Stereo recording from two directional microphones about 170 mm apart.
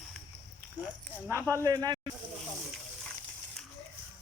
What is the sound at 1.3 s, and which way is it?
Speech, 15° right (ahead or behind).